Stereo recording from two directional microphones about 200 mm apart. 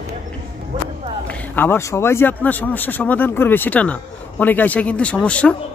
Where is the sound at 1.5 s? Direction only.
10° left (ahead or behind).